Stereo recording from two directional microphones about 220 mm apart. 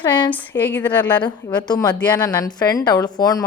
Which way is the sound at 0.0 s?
20° left (ahead or behind).